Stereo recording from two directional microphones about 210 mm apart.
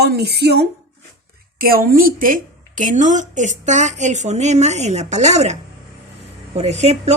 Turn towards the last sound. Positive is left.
turn(degrees=-30)  # may be behind; listen again after turning